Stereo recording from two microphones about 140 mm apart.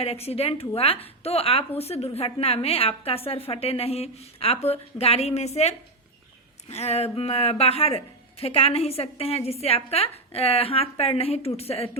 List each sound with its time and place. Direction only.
0.0 s speech: 45° left (ahead or behind)